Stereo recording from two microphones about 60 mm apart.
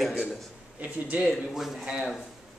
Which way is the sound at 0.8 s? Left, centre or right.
Right.